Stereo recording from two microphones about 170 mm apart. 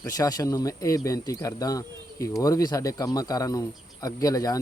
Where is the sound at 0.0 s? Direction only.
20° left (ahead or behind).